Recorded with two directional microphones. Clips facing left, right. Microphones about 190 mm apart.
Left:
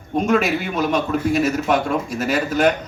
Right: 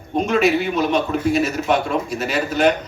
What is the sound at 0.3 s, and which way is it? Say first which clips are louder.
A man's voice: right 2 dB; 50° left (ahead or behind).